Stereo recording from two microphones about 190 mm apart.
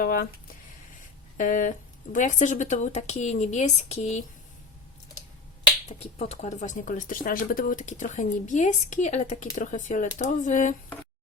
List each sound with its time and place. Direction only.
0.0 s speech: 50° left (ahead or behind)
6.0 s speech: 35° left (ahead or behind)